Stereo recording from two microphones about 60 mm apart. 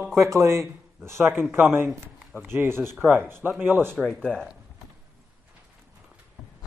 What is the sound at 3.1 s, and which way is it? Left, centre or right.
Speech, right.